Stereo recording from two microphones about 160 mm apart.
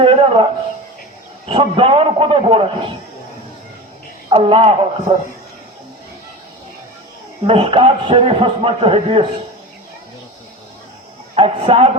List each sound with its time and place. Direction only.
0.0 s a sound: 35° right (ahead or behind)
1.5 s a man's voice: 35° right (ahead or behind)
4.3 s a man's voice: 35° right (ahead or behind)
7.4 s a man's voice: 35° right (ahead or behind)
11.3 s a man's voice: 35° right (ahead or behind)